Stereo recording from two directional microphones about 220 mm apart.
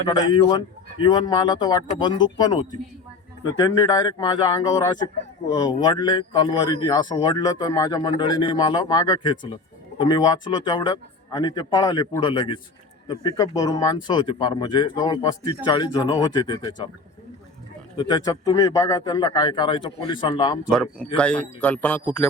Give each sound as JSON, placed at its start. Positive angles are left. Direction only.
{"t": 0.1, "sound": "a man's voice", "side_deg": 20}
{"t": 17.9, "sound": "a man's voice", "side_deg": 20}
{"t": 21.2, "sound": "a man's voice", "side_deg": 5}